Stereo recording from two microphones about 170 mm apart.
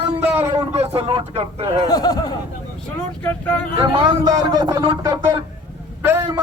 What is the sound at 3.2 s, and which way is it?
Speech, 10° left (ahead or behind).